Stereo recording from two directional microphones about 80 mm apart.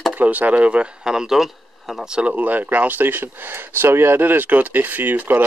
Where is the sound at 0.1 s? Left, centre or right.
Right.